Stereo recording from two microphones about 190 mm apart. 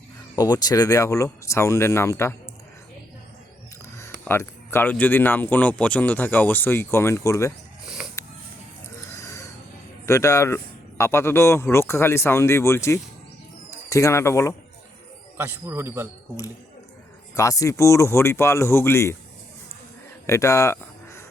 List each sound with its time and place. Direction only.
0.3 s speech: 20° left (ahead or behind)
4.3 s speech: 10° left (ahead or behind)
8.2 s a sound: 15° left (ahead or behind)
10.1 s speech: 15° left (ahead or behind)
15.4 s a man's voice: 10° right (ahead or behind)
17.3 s speech: 15° left (ahead or behind)
20.2 s a sound: 15° left (ahead or behind)